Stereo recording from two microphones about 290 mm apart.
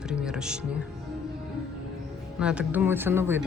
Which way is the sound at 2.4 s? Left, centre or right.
Centre.